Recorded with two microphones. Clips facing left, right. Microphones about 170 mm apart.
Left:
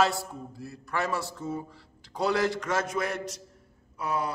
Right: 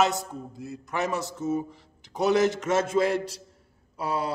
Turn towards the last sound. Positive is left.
turn(degrees=-30)  # may be behind; listen again after turning